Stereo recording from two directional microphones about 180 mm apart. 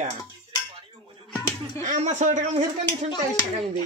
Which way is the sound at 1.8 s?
40° right (ahead or behind).